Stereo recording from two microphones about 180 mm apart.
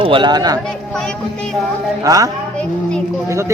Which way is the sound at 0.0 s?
25° right (ahead or behind).